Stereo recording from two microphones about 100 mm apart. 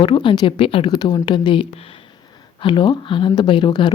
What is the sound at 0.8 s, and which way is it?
Speech, 45° left (ahead or behind).